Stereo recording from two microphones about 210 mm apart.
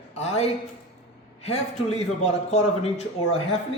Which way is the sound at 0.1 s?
30° left (ahead or behind).